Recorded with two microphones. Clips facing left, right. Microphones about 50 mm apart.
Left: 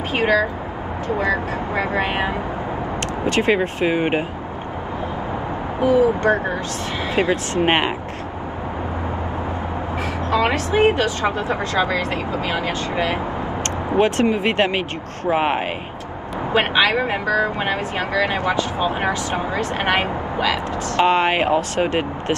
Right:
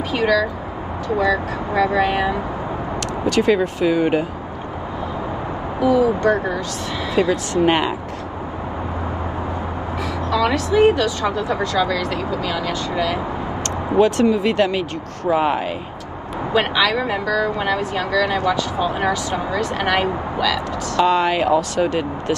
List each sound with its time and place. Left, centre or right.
0.1 s speech: left
5.8 s speech: left
10.3 s speech: left